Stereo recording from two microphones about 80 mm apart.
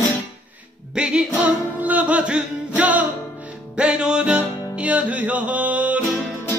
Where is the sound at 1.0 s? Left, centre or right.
Centre.